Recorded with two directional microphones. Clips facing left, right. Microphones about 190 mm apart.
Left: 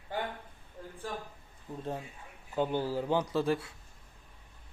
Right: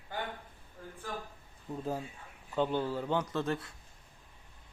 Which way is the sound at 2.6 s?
10° left (ahead or behind).